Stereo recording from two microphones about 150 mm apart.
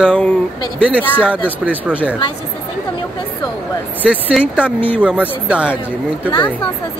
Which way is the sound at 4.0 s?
5° right (ahead or behind).